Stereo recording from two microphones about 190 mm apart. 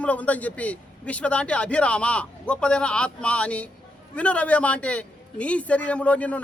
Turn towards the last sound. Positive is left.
turn(degrees=5)  # may be behind; listen again after turning